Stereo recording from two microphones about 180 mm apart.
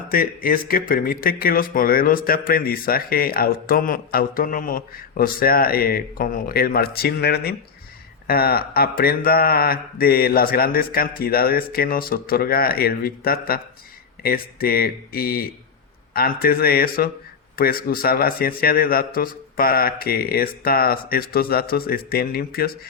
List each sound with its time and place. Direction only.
0.1 s speech: 55° left (ahead or behind)